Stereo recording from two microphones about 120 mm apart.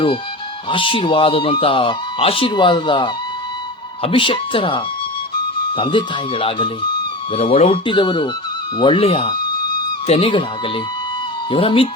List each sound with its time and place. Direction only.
0.7 s speech: 45° left (ahead or behind)
7.3 s speech: 55° left (ahead or behind)
7.9 s speech: 40° left (ahead or behind)
11.5 s speech: 45° left (ahead or behind)